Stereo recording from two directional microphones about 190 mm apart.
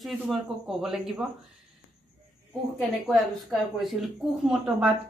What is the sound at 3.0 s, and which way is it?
A woman's voice, centre (ahead or behind).